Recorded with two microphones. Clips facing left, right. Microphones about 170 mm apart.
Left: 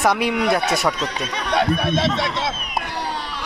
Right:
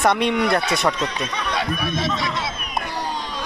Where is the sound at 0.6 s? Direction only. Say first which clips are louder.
Left 2 dB; 45° left (ahead or behind).